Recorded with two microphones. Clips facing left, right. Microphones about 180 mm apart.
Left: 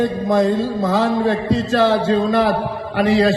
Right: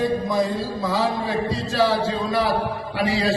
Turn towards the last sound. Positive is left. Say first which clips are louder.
# left 7 dB
turn(degrees=50)  # may be behind; listen again after turning